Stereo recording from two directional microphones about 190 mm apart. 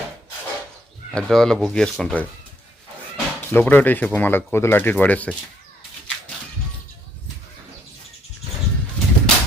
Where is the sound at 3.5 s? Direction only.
10° left (ahead or behind).